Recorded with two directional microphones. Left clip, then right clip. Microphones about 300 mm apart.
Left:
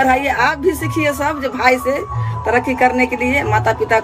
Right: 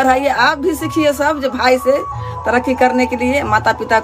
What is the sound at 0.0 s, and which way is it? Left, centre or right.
Speech, centre.